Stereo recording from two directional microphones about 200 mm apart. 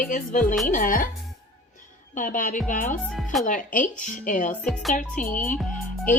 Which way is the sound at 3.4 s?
40° left (ahead or behind).